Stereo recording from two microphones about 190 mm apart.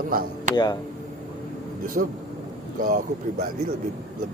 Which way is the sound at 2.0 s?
60° right (ahead or behind).